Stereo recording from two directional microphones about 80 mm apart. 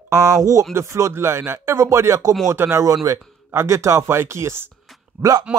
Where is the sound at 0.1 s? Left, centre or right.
Right.